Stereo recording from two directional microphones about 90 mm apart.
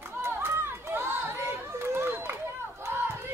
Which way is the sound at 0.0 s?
25° right (ahead or behind).